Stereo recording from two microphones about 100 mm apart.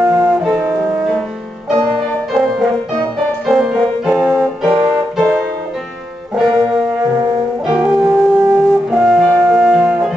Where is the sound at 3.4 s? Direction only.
5° right (ahead or behind).